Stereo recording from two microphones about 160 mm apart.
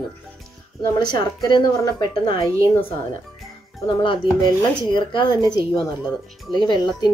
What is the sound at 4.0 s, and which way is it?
Speech, 30° left (ahead or behind).